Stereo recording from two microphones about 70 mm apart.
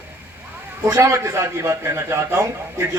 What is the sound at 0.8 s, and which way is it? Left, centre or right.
A man's voice, right.